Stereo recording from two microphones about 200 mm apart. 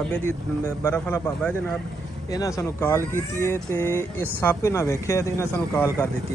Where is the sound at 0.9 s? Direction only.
10° left (ahead or behind).